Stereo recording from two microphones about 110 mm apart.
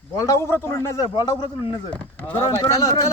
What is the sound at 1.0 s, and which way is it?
Speech, 35° left (ahead or behind).